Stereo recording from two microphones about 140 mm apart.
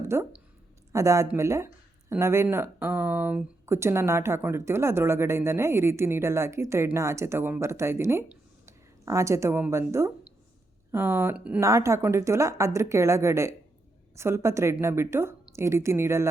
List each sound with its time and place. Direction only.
0.1 s speech: 20° right (ahead or behind)
11.6 s speech: 20° right (ahead or behind)